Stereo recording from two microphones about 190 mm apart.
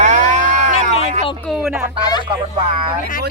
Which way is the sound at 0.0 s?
40° right (ahead or behind).